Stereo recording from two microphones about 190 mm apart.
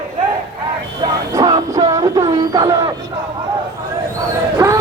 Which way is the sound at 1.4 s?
20° right (ahead or behind).